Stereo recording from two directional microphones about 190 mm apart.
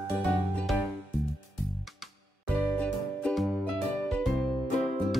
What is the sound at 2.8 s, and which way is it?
Music, 5° left (ahead or behind).